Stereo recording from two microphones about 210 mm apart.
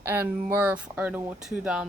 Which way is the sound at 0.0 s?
10° right (ahead or behind).